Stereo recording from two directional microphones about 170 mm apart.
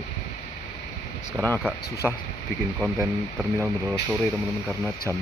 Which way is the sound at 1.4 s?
10° left (ahead or behind).